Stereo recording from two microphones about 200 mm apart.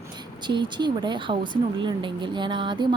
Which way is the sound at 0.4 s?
25° right (ahead or behind).